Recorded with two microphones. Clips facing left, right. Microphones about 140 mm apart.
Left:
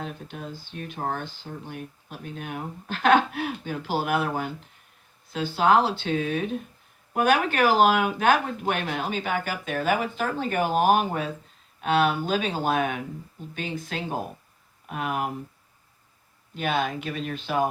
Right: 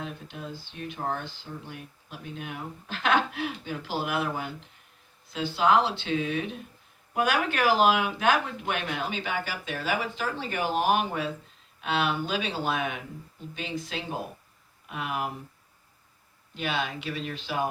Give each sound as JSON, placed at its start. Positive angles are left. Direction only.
{"t": 0.0, "sound": "speech", "side_deg": 45}
{"t": 16.6, "sound": "speech", "side_deg": 50}